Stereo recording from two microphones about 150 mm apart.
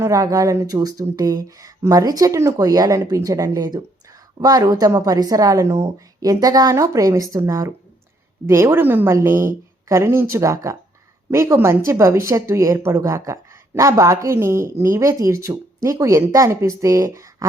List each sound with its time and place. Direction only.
0.0 s a woman's voice: 25° right (ahead or behind)